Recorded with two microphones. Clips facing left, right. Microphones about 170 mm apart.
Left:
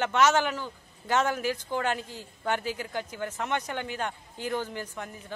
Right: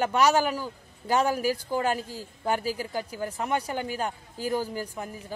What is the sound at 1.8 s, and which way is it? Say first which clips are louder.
A man's voice: right 3 dB; 35° right (ahead or behind).